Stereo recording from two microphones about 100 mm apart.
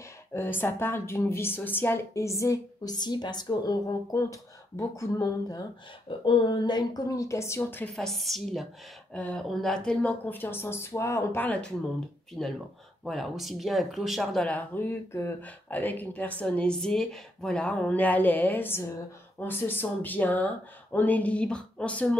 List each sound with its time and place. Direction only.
0.3 s a woman's voice: 20° left (ahead or behind); by 5.7 s 35° left (ahead or behind)
6.0 s speech: 55° left (ahead or behind); by 7.8 s 25° left (ahead or behind)
7.9 s speech: centre (ahead or behind)
12.4 s speech: centre (ahead or behind)
14.5 s speech: 20° left (ahead or behind)